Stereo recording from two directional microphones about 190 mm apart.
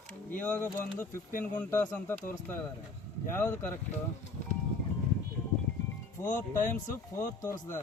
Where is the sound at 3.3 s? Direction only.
15° left (ahead or behind).